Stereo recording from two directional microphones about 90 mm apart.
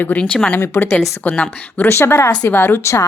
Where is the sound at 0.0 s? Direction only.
20° left (ahead or behind).